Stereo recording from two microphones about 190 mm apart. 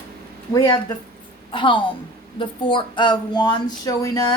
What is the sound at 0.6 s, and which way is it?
A woman's voice, 25° left (ahead or behind).